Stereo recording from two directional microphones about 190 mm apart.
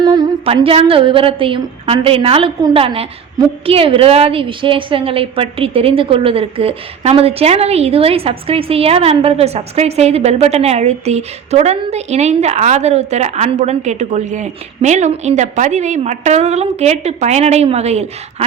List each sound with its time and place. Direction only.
0.0 s a woman's voice: 25° right (ahead or behind)